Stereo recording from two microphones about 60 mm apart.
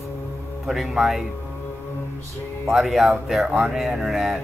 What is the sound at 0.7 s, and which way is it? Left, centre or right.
Speech, centre.